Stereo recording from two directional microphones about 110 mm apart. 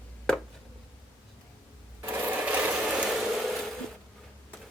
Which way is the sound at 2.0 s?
20° right (ahead or behind).